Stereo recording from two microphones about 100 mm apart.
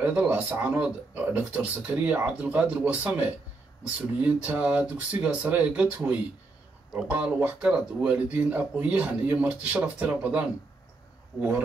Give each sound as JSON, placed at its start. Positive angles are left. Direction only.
{"t": 0.0, "sound": "speech", "side_deg": -15}